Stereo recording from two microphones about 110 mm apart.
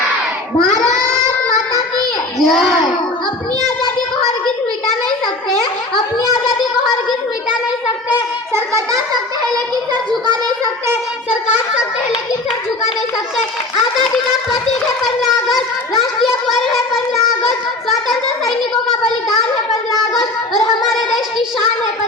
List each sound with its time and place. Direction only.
2.4 s a child's voice: centre (ahead or behind)
9.9 s speech: 40° right (ahead or behind)